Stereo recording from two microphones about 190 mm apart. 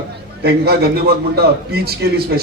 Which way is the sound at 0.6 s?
55° right (ahead or behind).